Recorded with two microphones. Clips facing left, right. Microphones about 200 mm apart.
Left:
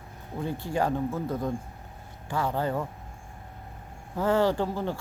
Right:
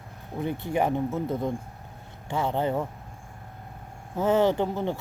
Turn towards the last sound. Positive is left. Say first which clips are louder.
# right 2 dB
turn(degrees=-20)  # may be behind; listen again after turning